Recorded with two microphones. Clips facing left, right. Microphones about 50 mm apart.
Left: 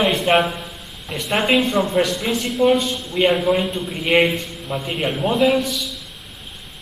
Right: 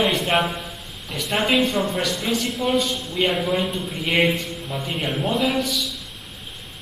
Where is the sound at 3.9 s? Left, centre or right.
Centre.